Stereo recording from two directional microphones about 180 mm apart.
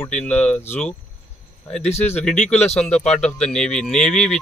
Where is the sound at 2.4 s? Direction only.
35° left (ahead or behind).